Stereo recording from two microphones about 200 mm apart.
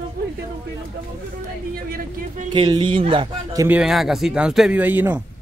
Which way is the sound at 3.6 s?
5° right (ahead or behind).